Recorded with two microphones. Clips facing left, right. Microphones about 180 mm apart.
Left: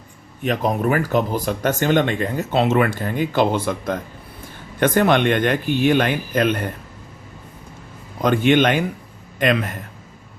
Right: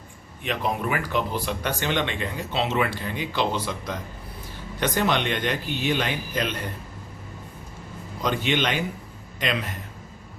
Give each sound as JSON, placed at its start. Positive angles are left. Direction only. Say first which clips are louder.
{"t": 0.4, "sound": "speech", "louder": "left 7 dB", "side_deg": 45}
{"t": 8.2, "sound": "speech", "louder": "left 9 dB", "side_deg": 50}